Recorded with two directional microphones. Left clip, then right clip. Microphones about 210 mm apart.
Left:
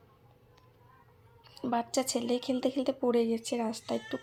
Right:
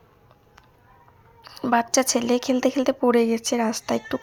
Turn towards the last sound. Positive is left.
turn(degrees=-20)  # may be behind; listen again after turning